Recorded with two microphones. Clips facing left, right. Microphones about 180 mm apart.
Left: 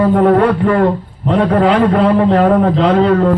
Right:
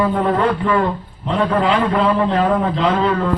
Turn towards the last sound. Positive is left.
turn(degrees=45)  # may be behind; listen again after turning